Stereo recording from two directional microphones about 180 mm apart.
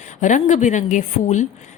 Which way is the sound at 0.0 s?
45° left (ahead or behind).